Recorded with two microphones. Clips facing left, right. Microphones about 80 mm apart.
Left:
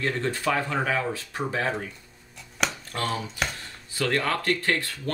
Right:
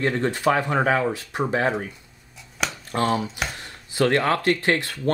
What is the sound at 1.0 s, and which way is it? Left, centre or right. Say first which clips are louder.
Speech: right 5 dB; centre.